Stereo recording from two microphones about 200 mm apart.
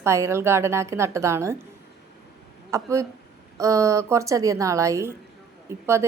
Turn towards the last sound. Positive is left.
turn(degrees=-15)  # may be behind; listen again after turning